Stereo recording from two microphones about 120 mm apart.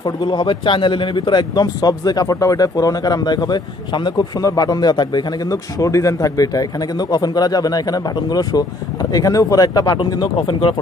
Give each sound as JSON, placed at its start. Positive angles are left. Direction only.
{"t": 0.0, "sound": "a man's voice", "side_deg": 40}